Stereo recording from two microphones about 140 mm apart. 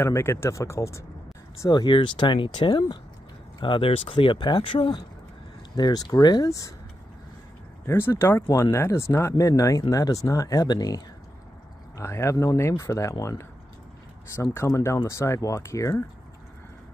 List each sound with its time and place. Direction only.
0.0 s speech: 20° left (ahead or behind)
7.8 s speech: 20° left (ahead or behind)
12.0 s speech: 20° left (ahead or behind)